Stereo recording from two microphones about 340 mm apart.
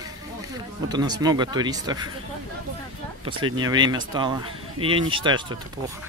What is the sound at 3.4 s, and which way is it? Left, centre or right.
Speech, centre.